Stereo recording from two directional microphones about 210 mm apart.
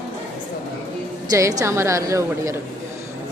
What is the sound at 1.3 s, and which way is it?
A woman's voice, 15° right (ahead or behind).